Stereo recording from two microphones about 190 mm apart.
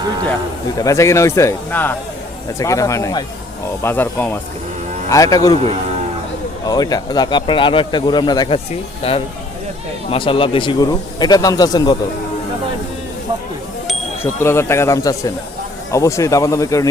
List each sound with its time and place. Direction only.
0.8 s speech: 15° left (ahead or behind)
6.7 s speech: 20° left (ahead or behind)
14.4 s speech: 15° left (ahead or behind)